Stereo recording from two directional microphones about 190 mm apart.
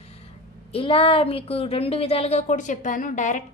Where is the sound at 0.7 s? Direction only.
30° left (ahead or behind).